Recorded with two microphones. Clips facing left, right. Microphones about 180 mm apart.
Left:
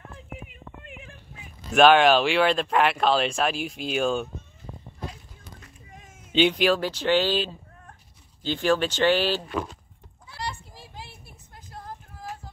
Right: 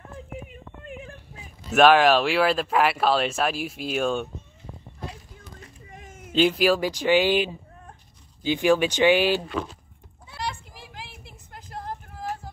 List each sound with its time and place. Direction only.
0.9 s a sound: 35° right (ahead or behind)
1.7 s speech: centre (ahead or behind)
6.3 s speech: 5° right (ahead or behind)
10.4 s vehicle: 90° right